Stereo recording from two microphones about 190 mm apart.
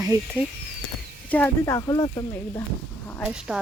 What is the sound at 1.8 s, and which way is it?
Speech, 20° left (ahead or behind).